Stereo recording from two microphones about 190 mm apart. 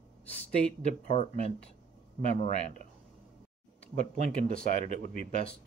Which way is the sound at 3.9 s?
45° right (ahead or behind).